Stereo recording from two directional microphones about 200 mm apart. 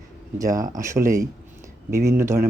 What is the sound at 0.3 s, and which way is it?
Speech, 15° right (ahead or behind).